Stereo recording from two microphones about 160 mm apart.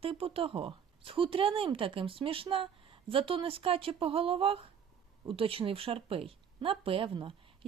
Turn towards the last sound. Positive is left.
turn(degrees=-35)  # may be behind; listen again after turning